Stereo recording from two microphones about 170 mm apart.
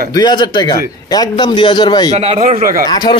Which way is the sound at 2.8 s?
25° left (ahead or behind).